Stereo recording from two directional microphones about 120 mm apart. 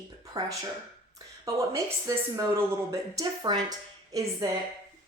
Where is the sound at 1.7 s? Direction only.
25° right (ahead or behind).